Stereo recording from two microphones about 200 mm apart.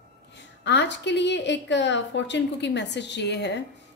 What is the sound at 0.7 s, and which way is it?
A woman's voice, 60° left (ahead or behind).